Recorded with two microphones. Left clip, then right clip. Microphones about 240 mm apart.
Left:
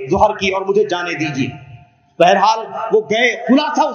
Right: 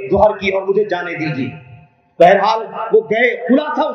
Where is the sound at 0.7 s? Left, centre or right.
Left.